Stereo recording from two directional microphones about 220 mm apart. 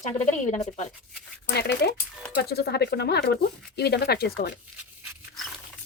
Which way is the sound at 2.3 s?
45° left (ahead or behind).